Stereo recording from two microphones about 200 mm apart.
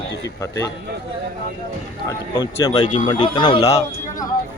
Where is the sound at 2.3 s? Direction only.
20° left (ahead or behind).